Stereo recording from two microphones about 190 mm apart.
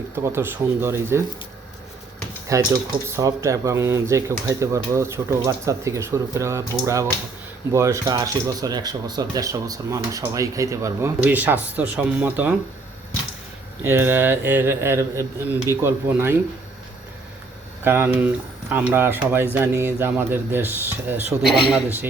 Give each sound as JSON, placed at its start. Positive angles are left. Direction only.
{"t": 0.2, "sound": "speech", "side_deg": -15}
{"t": 2.5, "sound": "speech", "side_deg": -15}
{"t": 13.8, "sound": "speech", "side_deg": -10}
{"t": 17.8, "sound": "speech", "side_deg": -10}